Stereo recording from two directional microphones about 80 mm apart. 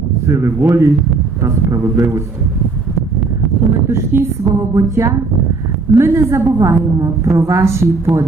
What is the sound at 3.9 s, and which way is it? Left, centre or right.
A woman's voice, right.